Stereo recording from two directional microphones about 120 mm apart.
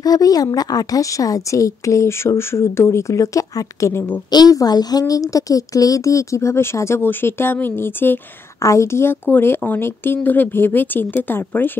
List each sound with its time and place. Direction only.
0.0 s a woman's voice: 30° left (ahead or behind); by 11.8 s 15° left (ahead or behind)